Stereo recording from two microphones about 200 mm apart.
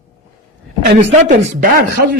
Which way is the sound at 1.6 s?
45° right (ahead or behind).